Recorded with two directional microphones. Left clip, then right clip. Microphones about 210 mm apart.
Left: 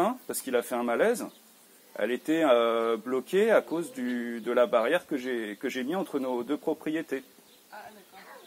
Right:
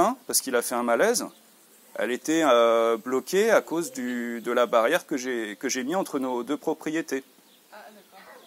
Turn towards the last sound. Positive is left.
turn(degrees=-40)  # may be behind; listen again after turning